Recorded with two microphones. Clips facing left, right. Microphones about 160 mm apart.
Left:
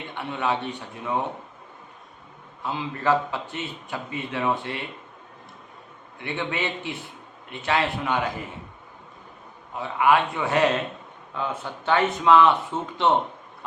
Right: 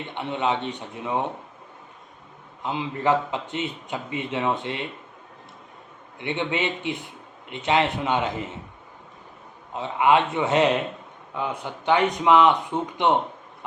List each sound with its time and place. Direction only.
0.1 s a man's voice: 20° right (ahead or behind)
2.6 s a man's voice: 20° right (ahead or behind)
6.1 s a man's voice: 20° right (ahead or behind)
9.7 s a man's voice: 20° right (ahead or behind)